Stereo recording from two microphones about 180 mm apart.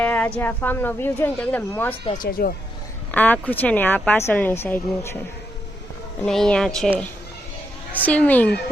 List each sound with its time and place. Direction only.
0.0 s a woman's voice: 10° left (ahead or behind)
2.1 s speech: 55° left (ahead or behind)
3.1 s a woman's voice: 10° left (ahead or behind)
6.2 s speech: 5° left (ahead or behind)
7.9 s a woman's voice: 10° left (ahead or behind)